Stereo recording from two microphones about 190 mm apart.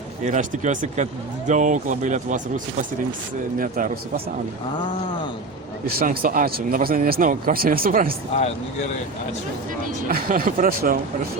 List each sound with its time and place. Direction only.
0.3 s speech: 40° right (ahead or behind)
5.8 s speech: 50° right (ahead or behind)
10.1 s speech: 50° right (ahead or behind)